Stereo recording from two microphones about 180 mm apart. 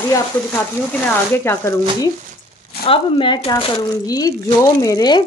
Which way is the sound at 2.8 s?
30° left (ahead or behind).